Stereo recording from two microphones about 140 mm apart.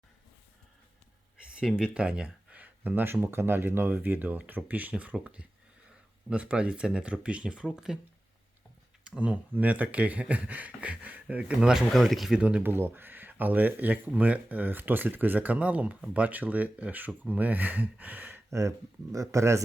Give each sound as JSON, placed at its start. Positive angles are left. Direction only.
{"t": 1.5, "sound": "speech", "side_deg": -5}
{"t": 9.0, "sound": "speech", "side_deg": -10}